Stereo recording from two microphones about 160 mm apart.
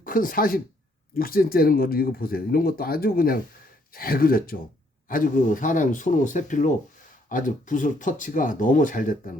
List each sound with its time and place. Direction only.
0.0 s speech: 60° left (ahead or behind)